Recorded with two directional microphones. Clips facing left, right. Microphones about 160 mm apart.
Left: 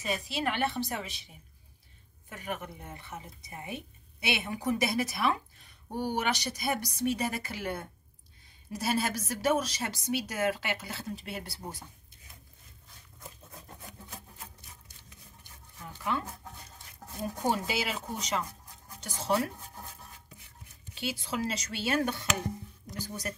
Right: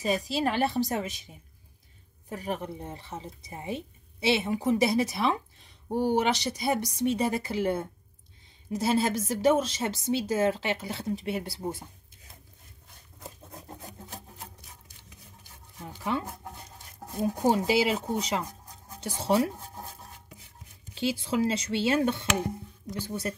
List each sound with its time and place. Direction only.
0.0 s a woman's voice: 40° right (ahead or behind)
13.2 s patter: 35° right (ahead or behind)
15.8 s speech: 30° right (ahead or behind)
17.3 s a woman's voice: 35° right (ahead or behind)
20.9 s speech: 30° right (ahead or behind)